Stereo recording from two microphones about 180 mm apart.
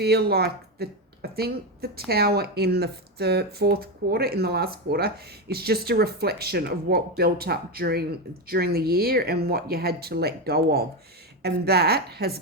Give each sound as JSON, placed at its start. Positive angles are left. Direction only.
{"t": 0.0, "sound": "speech", "side_deg": -60}